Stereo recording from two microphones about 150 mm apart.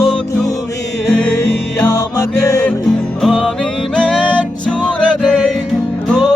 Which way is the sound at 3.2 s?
Centre (ahead or behind).